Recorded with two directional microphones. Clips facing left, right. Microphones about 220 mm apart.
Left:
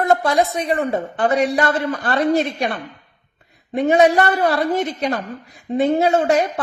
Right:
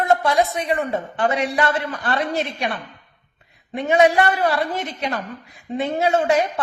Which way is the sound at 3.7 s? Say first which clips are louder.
Left 2 dB; 40° left (ahead or behind).